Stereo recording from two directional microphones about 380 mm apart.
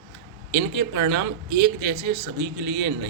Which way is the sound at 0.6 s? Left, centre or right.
Right.